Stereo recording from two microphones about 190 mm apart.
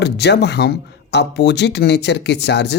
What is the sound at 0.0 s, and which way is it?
Speech, 60° left (ahead or behind).